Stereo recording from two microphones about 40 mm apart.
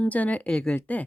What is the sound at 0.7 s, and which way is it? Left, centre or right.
Speech, left.